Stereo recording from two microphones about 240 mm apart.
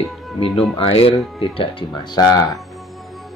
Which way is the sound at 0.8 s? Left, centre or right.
Left.